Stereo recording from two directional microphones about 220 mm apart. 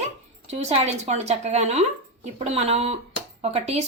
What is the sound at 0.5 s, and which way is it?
Speech, 30° right (ahead or behind).